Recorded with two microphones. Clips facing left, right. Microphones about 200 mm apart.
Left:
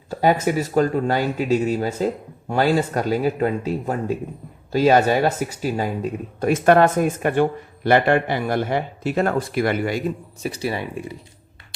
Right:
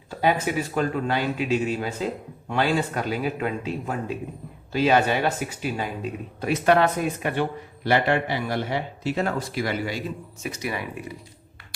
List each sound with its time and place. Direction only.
0.1 s speech: 40° left (ahead or behind)
10.4 s speech: 30° left (ahead or behind)